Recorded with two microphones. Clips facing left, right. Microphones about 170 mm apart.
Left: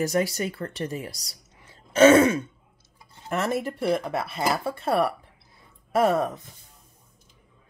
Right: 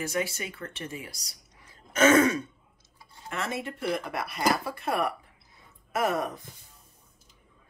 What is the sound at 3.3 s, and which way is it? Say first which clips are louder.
Speech: left 7 dB; 40° left (ahead or behind).